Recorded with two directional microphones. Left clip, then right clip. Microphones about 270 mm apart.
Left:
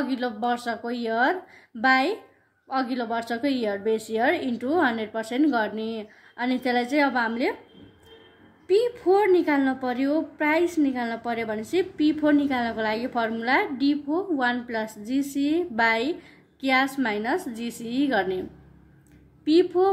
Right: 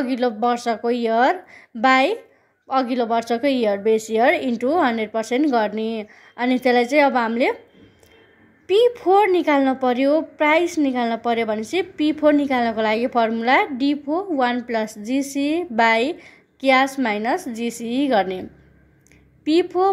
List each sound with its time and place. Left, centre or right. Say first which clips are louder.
0.0 s speech: right 7 dB; right
8.6 s speech: right 5 dB; right
19.4 s speech: right 2 dB; right